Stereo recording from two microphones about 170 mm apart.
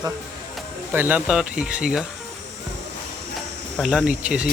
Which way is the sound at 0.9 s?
10° right (ahead or behind).